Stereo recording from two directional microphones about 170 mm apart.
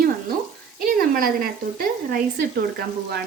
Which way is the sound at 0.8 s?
60° right (ahead or behind).